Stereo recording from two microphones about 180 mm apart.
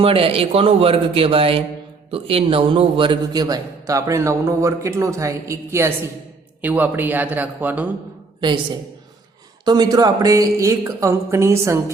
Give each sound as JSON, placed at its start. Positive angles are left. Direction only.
{"t": 0.0, "sound": "a man's voice", "side_deg": -30}
{"t": 8.4, "sound": "a woman's voice", "side_deg": -25}